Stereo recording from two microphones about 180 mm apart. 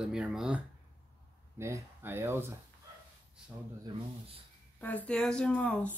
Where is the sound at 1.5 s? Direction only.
15° right (ahead or behind).